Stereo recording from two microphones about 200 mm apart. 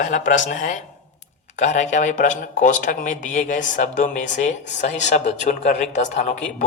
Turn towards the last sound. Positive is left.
turn(degrees=35)  # may be behind; listen again after turning